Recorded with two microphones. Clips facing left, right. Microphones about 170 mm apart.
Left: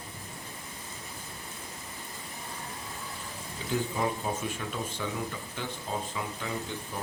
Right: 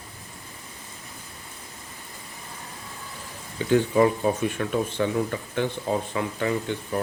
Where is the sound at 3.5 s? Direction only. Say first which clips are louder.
Right 11 dB; 75° right (ahead or behind).